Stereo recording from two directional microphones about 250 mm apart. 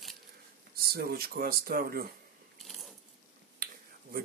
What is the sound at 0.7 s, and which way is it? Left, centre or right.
Speech, right.